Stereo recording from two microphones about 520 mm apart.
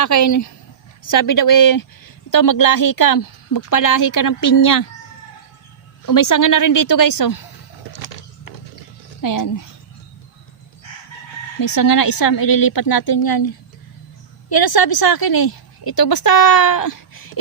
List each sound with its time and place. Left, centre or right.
0.0 s a woman's voice: left
6.1 s a woman's voice: left
9.2 s a woman's voice: left
11.6 s a woman's voice: left
14.5 s a woman's voice: left